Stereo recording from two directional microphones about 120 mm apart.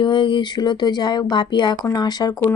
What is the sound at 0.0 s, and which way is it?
Speech, 40° left (ahead or behind).